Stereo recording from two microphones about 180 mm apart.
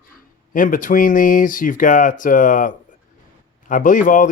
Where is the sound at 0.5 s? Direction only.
50° left (ahead or behind).